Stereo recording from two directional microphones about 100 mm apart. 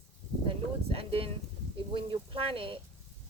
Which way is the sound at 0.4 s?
70° right (ahead or behind).